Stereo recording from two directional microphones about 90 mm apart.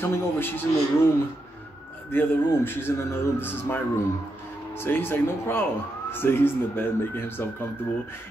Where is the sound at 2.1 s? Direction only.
25° left (ahead or behind).